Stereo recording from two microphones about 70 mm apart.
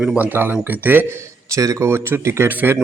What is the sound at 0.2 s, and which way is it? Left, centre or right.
Speech, right.